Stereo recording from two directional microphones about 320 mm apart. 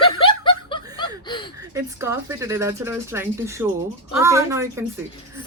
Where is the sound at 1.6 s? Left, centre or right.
Centre.